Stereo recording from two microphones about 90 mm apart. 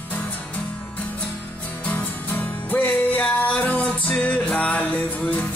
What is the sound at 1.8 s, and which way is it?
Music, 20° left (ahead or behind).